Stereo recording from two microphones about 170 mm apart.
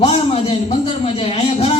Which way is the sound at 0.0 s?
40° left (ahead or behind).